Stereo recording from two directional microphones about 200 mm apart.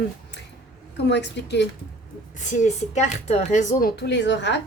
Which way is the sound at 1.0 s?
60° left (ahead or behind).